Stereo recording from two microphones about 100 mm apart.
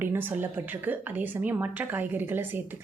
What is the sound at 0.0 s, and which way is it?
A woman's voice, 20° right (ahead or behind).